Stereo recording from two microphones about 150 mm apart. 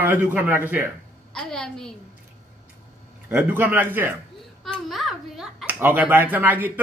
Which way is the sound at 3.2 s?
15° right (ahead or behind).